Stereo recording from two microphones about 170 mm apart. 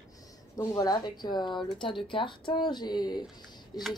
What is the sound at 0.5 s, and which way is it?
A woman's voice, 20° left (ahead or behind).